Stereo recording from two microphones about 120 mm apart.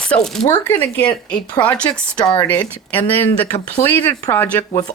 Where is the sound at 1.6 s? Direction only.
10° left (ahead or behind).